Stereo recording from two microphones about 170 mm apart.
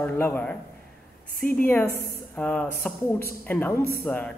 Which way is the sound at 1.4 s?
60° left (ahead or behind).